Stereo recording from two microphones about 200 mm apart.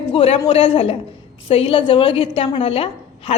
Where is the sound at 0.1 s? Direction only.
30° left (ahead or behind).